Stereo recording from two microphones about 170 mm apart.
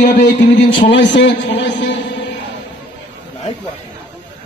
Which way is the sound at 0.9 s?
90° left.